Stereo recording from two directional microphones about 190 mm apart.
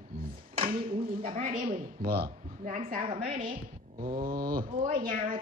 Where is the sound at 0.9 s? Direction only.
35° right (ahead or behind).